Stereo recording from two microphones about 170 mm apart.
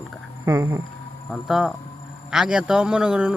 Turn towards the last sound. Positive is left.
turn(degrees=-5)  # may be behind; listen again after turning